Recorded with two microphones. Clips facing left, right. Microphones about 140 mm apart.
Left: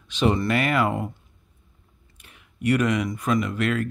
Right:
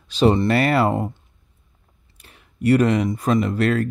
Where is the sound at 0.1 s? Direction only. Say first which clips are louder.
Right 5 dB; 35° right (ahead or behind).